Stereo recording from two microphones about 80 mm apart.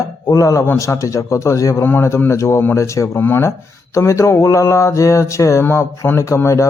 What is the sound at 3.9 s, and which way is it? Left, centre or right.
A man's voice, left.